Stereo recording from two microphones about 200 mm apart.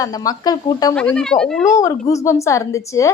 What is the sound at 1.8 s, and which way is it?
A woman's voice, 15° left (ahead or behind).